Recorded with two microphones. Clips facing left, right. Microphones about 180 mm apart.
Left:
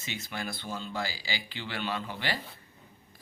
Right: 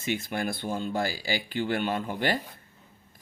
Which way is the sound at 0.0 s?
50° right (ahead or behind).